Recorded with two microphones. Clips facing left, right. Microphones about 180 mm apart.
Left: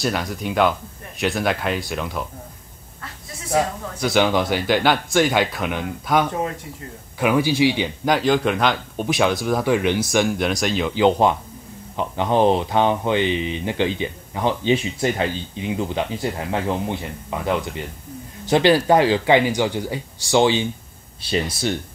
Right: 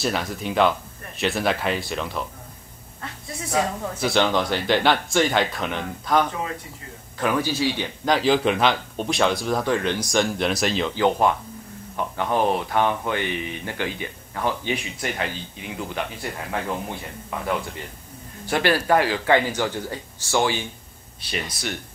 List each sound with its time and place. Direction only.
0.0 s speech: centre (ahead or behind)
4.0 s a man's voice: 5° left (ahead or behind)
8.0 s speech: centre (ahead or behind)
11.0 s speech: 20° left (ahead or behind)